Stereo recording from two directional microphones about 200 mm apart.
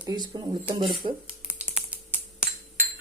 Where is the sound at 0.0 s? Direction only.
20° right (ahead or behind).